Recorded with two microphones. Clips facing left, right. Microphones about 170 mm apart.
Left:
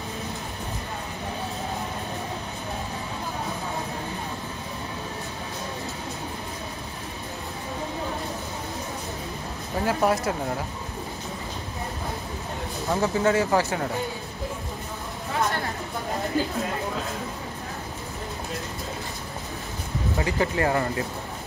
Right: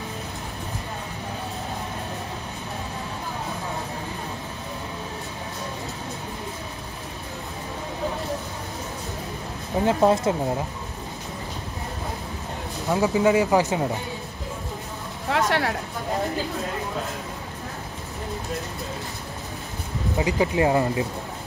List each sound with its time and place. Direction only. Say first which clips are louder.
9.8 s speech: right 4 dB; 25° right (ahead or behind)
12.9 s speech: right 3 dB; 15° right (ahead or behind)
15.2 s a sound: right 4 dB; 80° right
20.2 s speech: right 4 dB; 15° right (ahead or behind)